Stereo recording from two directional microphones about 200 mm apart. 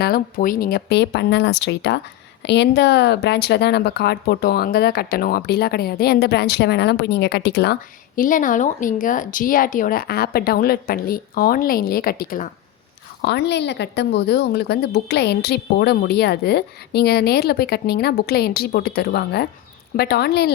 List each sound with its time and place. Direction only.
0.0 s speech: 45° left (ahead or behind)
13.2 s speech: 55° left (ahead or behind)